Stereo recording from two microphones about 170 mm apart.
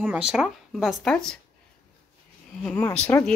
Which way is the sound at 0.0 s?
5° right (ahead or behind).